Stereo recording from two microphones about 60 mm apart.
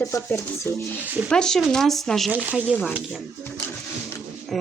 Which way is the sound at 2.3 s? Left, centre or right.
Right.